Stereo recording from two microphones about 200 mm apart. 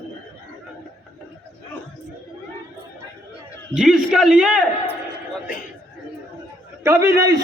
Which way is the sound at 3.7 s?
5° right (ahead or behind).